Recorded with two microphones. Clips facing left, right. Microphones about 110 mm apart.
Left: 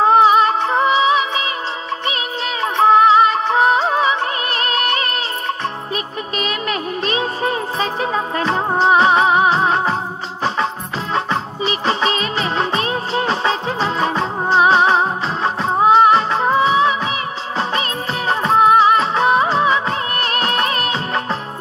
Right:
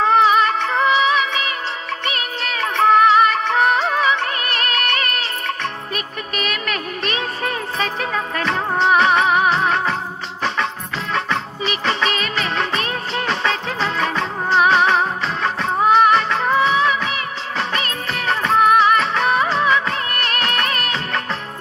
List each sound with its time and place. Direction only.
0.0 s music: 35° left (ahead or behind)
11.1 s music: 30° left (ahead or behind)